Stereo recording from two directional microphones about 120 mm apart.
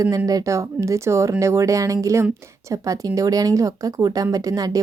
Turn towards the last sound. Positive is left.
turn(degrees=-30)  # may be behind; listen again after turning